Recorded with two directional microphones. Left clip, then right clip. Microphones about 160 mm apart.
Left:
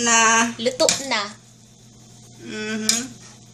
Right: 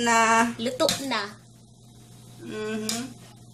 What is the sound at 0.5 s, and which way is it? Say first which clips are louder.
Speech: left 7 dB; 20° left (ahead or behind).